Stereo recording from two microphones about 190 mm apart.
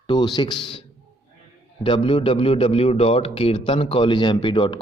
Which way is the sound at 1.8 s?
25° left (ahead or behind).